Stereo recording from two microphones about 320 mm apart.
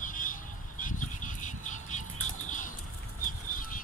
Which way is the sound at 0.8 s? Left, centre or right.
Left.